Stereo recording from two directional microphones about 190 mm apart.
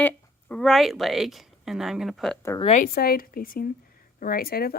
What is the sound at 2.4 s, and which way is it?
Speech, 15° left (ahead or behind).